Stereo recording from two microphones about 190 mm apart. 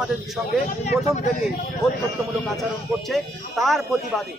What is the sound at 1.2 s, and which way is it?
Speech, 40° left (ahead or behind).